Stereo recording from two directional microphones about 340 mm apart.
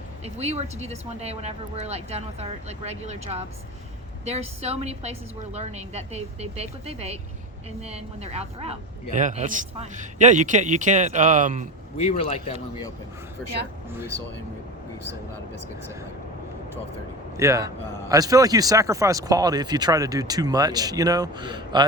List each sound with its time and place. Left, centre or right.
0.3 s speech: centre
12.0 s speech: centre
13.4 s speech: centre
17.3 s speech: centre